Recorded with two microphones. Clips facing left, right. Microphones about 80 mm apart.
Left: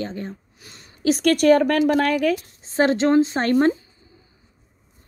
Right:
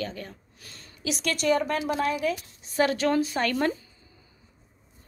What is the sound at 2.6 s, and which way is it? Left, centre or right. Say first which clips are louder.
Speech: left 5 dB; left.